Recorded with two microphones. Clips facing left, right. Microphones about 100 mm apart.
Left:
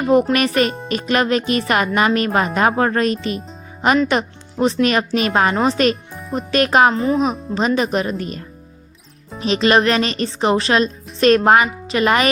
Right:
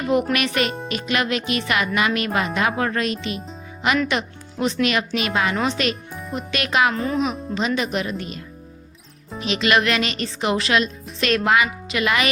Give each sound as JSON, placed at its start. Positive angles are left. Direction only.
{"t": 0.0, "sound": "speech", "side_deg": 40}
{"t": 6.9, "sound": "speech", "side_deg": 30}
{"t": 9.4, "sound": "speech", "side_deg": 35}